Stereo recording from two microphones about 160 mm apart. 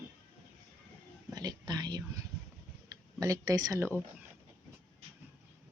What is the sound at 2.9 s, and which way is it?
Speech, 20° right (ahead or behind).